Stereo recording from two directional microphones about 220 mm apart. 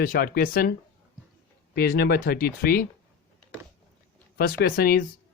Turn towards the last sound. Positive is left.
turn(degrees=40)  # may be behind; listen again after turning